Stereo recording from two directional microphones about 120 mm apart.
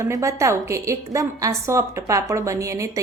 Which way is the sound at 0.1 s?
25° right (ahead or behind).